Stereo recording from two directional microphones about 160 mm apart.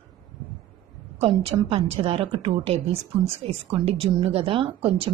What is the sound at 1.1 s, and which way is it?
A woman's voice, 35° right (ahead or behind).